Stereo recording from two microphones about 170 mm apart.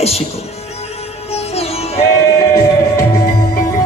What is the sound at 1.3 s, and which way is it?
Music, 35° left (ahead or behind).